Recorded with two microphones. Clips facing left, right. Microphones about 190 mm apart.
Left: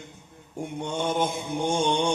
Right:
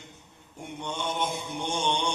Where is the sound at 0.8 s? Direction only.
50° left (ahead or behind).